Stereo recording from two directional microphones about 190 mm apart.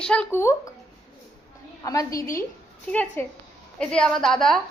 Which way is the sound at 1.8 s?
20° left (ahead or behind).